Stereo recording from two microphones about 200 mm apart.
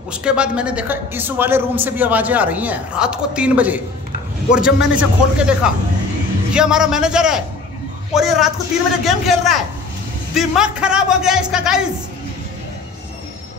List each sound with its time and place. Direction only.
0.1 s a man's voice: 5° right (ahead or behind)